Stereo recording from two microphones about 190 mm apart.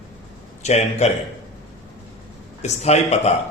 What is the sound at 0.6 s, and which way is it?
Speech, 35° left (ahead or behind).